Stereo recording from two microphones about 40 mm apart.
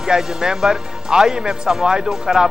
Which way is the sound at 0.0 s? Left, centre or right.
Centre.